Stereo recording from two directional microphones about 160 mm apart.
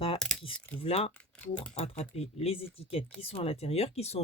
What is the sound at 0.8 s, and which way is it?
Speech, 40° left (ahead or behind).